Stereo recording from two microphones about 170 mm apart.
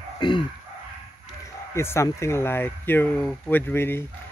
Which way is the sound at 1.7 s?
15° left (ahead or behind).